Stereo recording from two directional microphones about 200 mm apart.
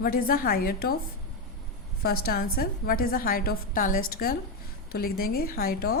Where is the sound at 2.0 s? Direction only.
50° left (ahead or behind).